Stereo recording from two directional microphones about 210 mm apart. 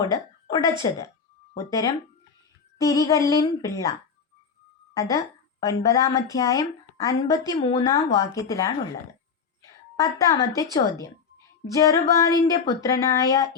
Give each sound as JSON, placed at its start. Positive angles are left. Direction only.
{"t": 0.0, "sound": "a sound", "side_deg": 20}
{"t": 0.8, "sound": "a woman's voice", "side_deg": 15}
{"t": 4.9, "sound": "a woman's voice", "side_deg": 15}
{"t": 10.0, "sound": "a woman's voice", "side_deg": 15}
{"t": 11.6, "sound": "a woman's voice", "side_deg": 15}